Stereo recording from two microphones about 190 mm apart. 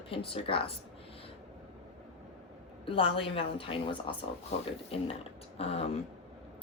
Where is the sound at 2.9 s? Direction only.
30° left (ahead or behind).